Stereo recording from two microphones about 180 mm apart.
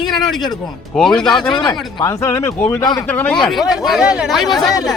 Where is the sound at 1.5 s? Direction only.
25° left (ahead or behind); by 3.3 s 10° left (ahead or behind).